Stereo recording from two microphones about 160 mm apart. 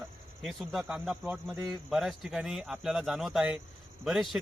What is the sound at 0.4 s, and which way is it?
A man's voice, centre (ahead or behind).